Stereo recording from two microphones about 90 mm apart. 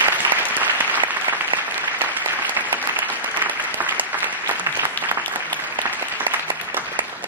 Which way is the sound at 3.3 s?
20° right (ahead or behind).